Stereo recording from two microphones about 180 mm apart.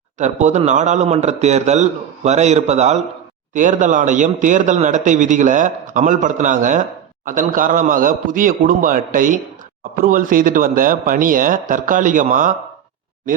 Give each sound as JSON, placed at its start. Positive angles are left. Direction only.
{"t": 0.2, "sound": "a man's voice", "side_deg": -40}